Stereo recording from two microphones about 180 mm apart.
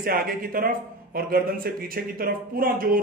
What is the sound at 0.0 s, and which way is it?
A man's voice, 55° right (ahead or behind).